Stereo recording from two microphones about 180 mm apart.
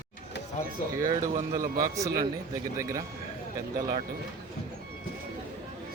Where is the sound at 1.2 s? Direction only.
45° right (ahead or behind).